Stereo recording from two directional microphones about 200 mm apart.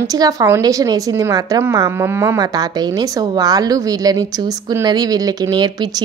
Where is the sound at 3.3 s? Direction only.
20° right (ahead or behind).